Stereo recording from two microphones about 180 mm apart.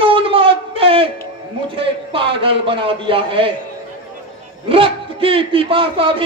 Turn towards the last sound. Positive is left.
turn(degrees=-30)  # may be behind; listen again after turning